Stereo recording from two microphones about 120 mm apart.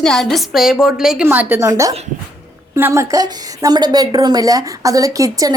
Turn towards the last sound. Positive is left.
turn(degrees=-30)  # may be behind; listen again after turning